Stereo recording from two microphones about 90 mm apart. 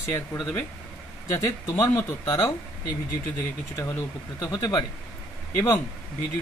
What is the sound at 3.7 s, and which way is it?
Speech, 35° left (ahead or behind).